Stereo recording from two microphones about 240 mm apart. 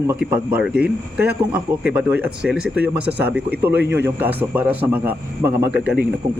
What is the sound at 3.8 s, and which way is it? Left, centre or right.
Speech, right.